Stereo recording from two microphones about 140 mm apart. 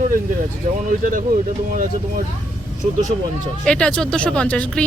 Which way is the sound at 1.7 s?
80° right.